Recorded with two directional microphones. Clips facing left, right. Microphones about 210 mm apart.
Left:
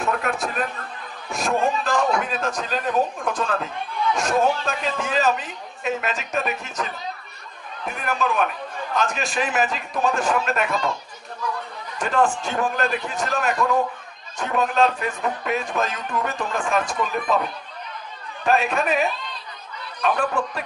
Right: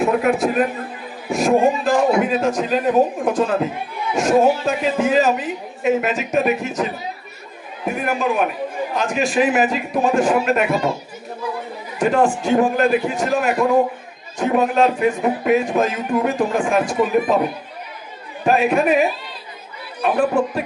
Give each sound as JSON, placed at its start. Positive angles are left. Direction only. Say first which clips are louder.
{"t": 0.0, "sound": "a sound", "louder": "right 8 dB", "side_deg": -10}
{"t": 0.5, "sound": "a man's voice", "louder": "right 9 dB", "side_deg": -10}
{"t": 12.0, "sound": "a man's voice", "louder": "right 5 dB", "side_deg": -10}
{"t": 13.6, "sound": "a man's voice", "louder": "right 6 dB", "side_deg": -25}